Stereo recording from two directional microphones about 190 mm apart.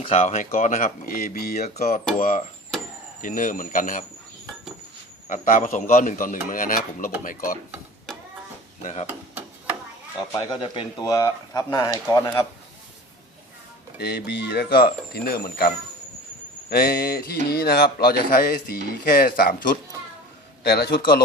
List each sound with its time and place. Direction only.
0.0 s speech: 35° left (ahead or behind)
5.3 s speech: 45° left (ahead or behind)
8.8 s speech: 35° left (ahead or behind)
10.3 s speech: 25° left (ahead or behind)
14.0 s speech: 55° left (ahead or behind)